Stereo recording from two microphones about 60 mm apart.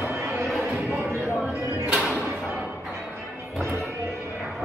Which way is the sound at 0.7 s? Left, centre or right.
Right.